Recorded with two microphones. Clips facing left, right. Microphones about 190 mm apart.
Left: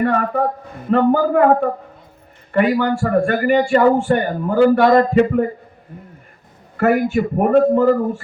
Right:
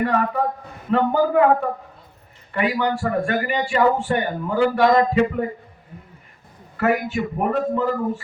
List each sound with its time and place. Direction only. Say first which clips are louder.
0.0 s a man's voice: left 3 dB; 45° left (ahead or behind)
6.7 s a man's voice: left 5 dB; 45° left (ahead or behind)